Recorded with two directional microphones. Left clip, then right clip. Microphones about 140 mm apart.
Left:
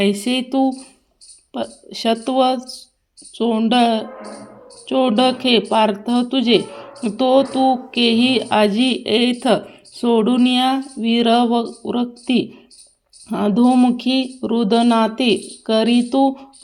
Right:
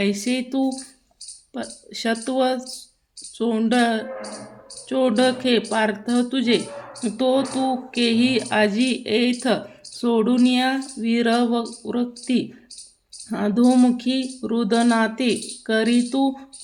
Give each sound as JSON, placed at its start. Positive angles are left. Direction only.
{"t": 0.0, "sound": "speech", "side_deg": 20}